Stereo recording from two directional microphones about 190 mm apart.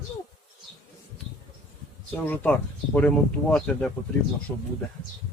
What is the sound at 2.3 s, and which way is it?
Speech, 10° left (ahead or behind).